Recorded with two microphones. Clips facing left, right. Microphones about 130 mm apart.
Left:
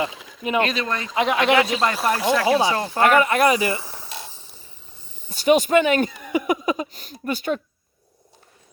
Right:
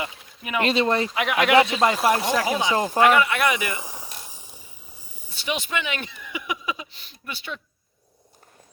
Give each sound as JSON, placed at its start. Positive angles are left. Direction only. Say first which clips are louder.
{"t": 0.1, "sound": "a sound", "louder": "left 7 dB", "side_deg": 90}
{"t": 0.6, "sound": "speech", "louder": "right 3 dB", "side_deg": -30}
{"t": 1.1, "sound": "speech", "louder": "left 3 dB", "side_deg": 30}
{"t": 1.5, "sound": "speech", "louder": "right 2 dB", "side_deg": -25}
{"t": 3.0, "sound": "speech", "louder": "left 3 dB", "side_deg": 40}
{"t": 3.8, "sound": "mechanisms", "louder": "even", "side_deg": -15}
{"t": 4.3, "sound": "vehicle", "louder": "even", "side_deg": -15}
{"t": 5.3, "sound": "speech", "louder": "left 12 dB", "side_deg": 45}